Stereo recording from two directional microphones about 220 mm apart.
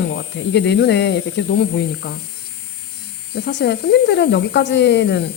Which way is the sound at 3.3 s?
50° left (ahead or behind).